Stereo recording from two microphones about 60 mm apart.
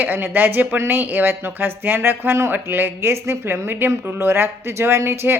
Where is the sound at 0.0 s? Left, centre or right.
Right.